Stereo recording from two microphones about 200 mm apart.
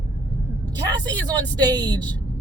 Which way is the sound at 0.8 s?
20° right (ahead or behind).